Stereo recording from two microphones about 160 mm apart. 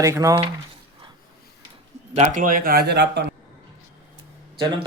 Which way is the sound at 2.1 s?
45° right (ahead or behind).